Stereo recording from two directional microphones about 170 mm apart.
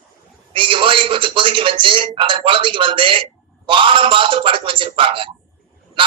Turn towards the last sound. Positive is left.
turn(degrees=-30)  # may be behind; listen again after turning